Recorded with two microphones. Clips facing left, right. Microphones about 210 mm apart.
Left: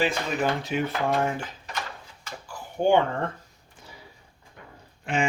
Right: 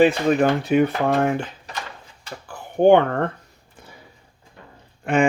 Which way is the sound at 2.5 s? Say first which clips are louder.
Right 8 dB; 60° right (ahead or behind).